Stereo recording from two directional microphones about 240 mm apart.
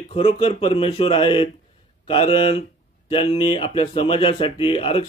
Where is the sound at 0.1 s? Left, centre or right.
Left.